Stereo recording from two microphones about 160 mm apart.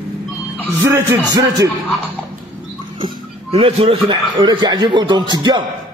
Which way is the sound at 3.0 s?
35° right (ahead or behind).